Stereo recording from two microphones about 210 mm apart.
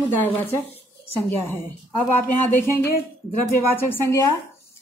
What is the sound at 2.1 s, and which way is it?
A woman's voice, 10° left (ahead or behind).